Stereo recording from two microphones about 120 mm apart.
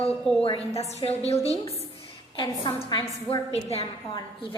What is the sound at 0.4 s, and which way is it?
A woman's voice, 50° left (ahead or behind).